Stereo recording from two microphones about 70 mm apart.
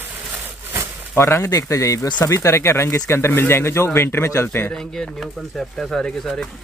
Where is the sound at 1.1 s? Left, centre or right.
Left.